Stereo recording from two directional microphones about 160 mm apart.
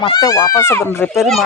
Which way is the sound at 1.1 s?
Centre (ahead or behind).